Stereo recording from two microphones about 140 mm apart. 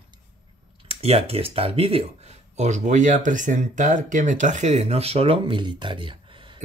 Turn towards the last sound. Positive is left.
turn(degrees=-35)  # may be behind; listen again after turning